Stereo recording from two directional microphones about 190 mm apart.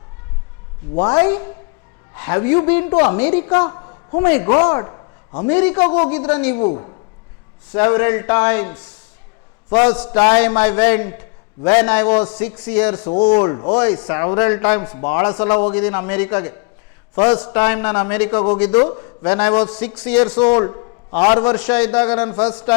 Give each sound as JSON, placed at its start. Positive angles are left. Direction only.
{"t": 1.2, "sound": "a man's voice", "side_deg": 15}
{"t": 3.8, "sound": "a sound", "side_deg": 25}
{"t": 4.3, "sound": "speech", "side_deg": 15}
{"t": 4.6, "sound": "a sound", "side_deg": 20}
{"t": 5.5, "sound": "speech", "side_deg": 10}
{"t": 6.7, "sound": "a woman's voice", "side_deg": 30}
{"t": 7.7, "sound": "speech", "side_deg": 15}
{"t": 13.4, "sound": "a woman's voice", "side_deg": 25}
{"t": 13.7, "sound": "speech", "side_deg": 10}
{"t": 18.9, "sound": "a man's voice", "side_deg": 25}
{"t": 19.2, "sound": "speech", "side_deg": 10}
{"t": 20.6, "sound": "a sound", "side_deg": 20}
{"t": 21.3, "sound": "speech", "side_deg": 10}